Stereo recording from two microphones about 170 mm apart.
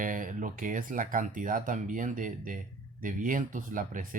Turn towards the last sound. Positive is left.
turn(degrees=-50)  # may be behind; listen again after turning